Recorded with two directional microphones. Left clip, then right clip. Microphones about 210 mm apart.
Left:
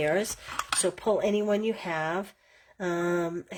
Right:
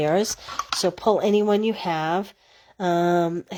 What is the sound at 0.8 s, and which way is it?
Speech, 35° right (ahead or behind).